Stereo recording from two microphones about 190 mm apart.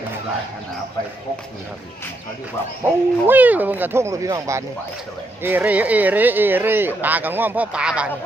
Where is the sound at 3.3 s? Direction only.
10° right (ahead or behind).